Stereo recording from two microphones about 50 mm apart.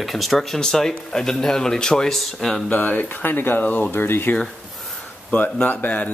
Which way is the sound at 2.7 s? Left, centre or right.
Left.